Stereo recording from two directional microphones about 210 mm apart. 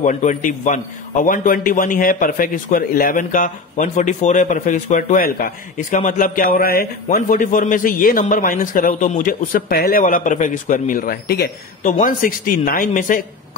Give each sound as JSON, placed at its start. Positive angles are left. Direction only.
{"t": 0.0, "sound": "a man's voice", "side_deg": 35}